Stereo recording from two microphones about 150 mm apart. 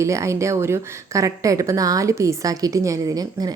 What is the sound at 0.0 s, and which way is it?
A woman's voice, 20° right (ahead or behind).